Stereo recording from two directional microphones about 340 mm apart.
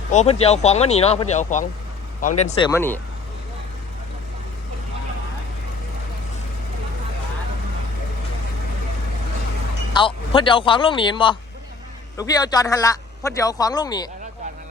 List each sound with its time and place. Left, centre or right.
0.1 s a man's voice: centre
9.9 s a man's voice: centre